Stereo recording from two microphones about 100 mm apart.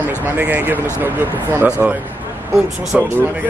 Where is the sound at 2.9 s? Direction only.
10° right (ahead or behind).